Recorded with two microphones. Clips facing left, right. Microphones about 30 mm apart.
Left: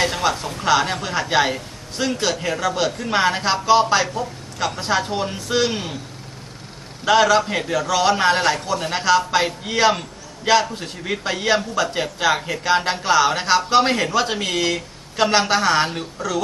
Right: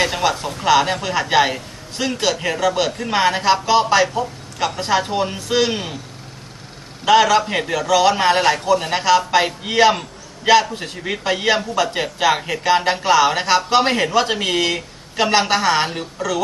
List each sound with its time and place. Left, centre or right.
0.0 s a sound: centre
0.6 s a man's voice: centre
7.0 s a man's voice: centre